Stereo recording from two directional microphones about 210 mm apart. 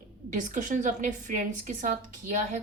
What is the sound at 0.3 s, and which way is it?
A woman's voice, 35° right (ahead or behind).